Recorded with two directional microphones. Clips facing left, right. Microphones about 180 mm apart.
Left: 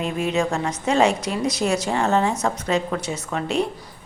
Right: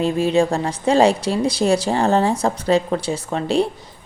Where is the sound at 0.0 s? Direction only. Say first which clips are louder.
Right 6 dB; 30° right (ahead or behind).